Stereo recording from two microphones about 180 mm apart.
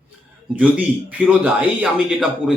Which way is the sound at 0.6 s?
10° right (ahead or behind).